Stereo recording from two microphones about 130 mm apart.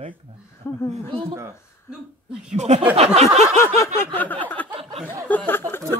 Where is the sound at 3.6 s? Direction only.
20° left (ahead or behind).